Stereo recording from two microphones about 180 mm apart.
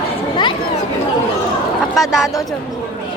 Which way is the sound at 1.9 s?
Centre (ahead or behind).